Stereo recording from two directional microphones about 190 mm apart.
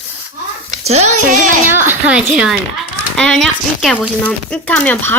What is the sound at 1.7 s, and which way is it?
Speech, 10° right (ahead or behind).